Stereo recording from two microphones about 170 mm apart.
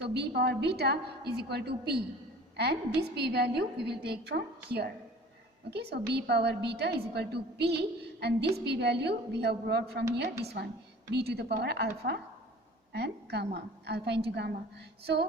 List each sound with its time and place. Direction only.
0.0 s a woman's voice: 80° right